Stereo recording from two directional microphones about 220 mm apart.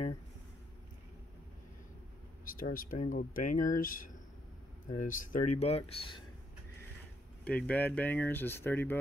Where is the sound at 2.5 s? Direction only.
40° left (ahead or behind); by 6.2 s 25° left (ahead or behind).